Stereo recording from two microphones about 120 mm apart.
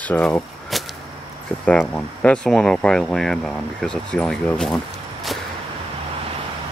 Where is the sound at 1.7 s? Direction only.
10° left (ahead or behind).